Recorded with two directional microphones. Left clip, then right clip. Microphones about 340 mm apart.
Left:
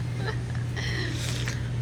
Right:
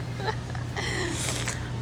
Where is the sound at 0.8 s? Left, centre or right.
Centre.